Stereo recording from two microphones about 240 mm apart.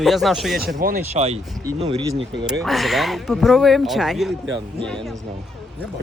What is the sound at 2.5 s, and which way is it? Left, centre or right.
Speech, centre.